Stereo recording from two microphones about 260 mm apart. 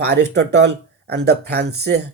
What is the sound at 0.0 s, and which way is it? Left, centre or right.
Speech, right.